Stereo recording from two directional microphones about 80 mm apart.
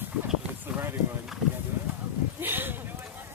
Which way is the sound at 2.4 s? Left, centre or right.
Right.